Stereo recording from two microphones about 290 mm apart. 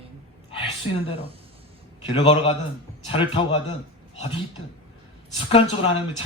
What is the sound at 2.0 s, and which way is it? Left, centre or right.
A man's voice, centre.